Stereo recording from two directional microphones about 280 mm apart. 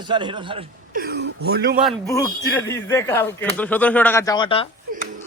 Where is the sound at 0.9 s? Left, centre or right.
Right.